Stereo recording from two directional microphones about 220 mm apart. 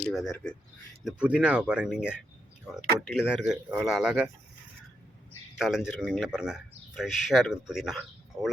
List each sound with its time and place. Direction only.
0.1 s a man's voice: centre (ahead or behind)
5.5 s a man's voice: centre (ahead or behind)